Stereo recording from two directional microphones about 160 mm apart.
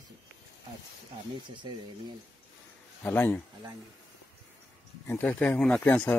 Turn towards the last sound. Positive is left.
turn(degrees=10)  # may be behind; listen again after turning